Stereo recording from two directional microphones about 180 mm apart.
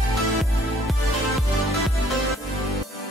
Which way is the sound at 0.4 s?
Centre (ahead or behind).